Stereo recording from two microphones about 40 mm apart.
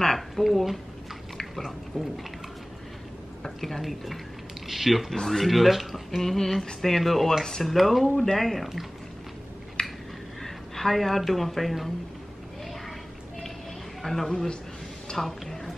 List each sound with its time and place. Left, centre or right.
0.4 s speech: centre
3.4 s a woman's voice: centre
5.1 s speech: centre
5.5 s speech: centre
7.6 s speech: centre
9.8 s a sound: left
10.4 s speech: centre
14.0 s speech: centre
14.3 s speech: centre
15.1 s a sound: centre